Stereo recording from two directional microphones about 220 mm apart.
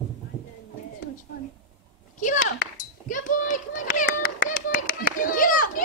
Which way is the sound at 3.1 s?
35° left (ahead or behind).